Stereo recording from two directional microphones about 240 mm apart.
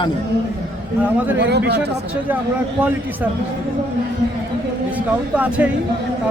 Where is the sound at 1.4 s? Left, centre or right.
Right.